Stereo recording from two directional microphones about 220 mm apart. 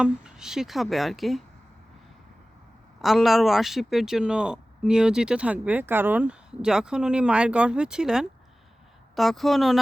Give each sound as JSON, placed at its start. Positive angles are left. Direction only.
{"t": 0.0, "sound": "speech", "side_deg": -5}
{"t": 3.0, "sound": "speech", "side_deg": 0}